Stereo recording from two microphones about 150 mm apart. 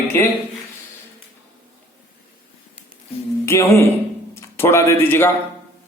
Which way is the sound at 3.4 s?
20° left (ahead or behind).